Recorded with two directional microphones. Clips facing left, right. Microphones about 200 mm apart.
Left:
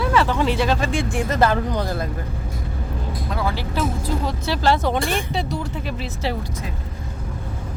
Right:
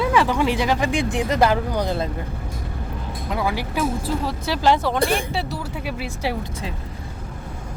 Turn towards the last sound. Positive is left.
turn(degrees=-10)  # may be behind; listen again after turning